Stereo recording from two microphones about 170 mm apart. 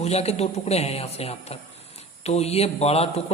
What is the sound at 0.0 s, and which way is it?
A man's voice, 40° left (ahead or behind).